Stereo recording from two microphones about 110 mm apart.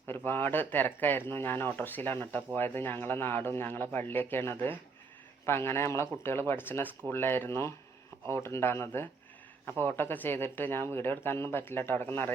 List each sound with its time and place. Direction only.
0.3 s speech: 20° left (ahead or behind)